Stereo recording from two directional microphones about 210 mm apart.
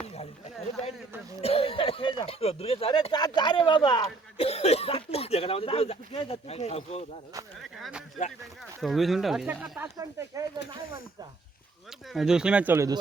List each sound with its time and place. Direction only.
1.4 s speech: 30° left (ahead or behind)
7.8 s speech: 5° right (ahead or behind)
10.0 s speech: 15° right (ahead or behind)
12.1 s speech: 5° right (ahead or behind)